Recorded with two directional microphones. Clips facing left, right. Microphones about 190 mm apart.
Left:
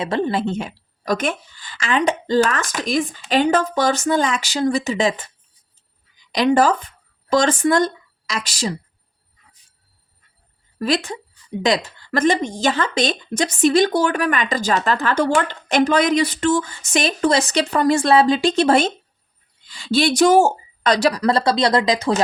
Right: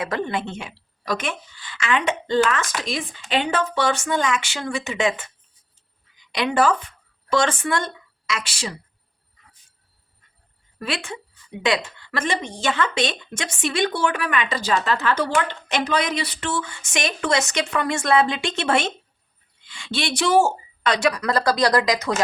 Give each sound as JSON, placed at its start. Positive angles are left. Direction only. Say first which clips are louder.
{"t": 0.0, "sound": "speech", "louder": "left 5 dB", "side_deg": 30}
{"t": 6.3, "sound": "speech", "louder": "left 4 dB", "side_deg": 40}
{"t": 10.8, "sound": "speech", "louder": "left 8 dB", "side_deg": 40}